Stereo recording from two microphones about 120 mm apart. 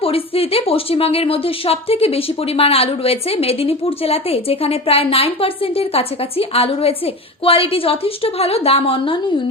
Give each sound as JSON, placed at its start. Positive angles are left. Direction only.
{"t": 0.0, "sound": "a woman's voice", "side_deg": 55}